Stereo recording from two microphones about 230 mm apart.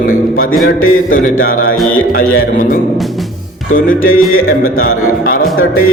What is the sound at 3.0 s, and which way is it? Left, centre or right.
Music, centre.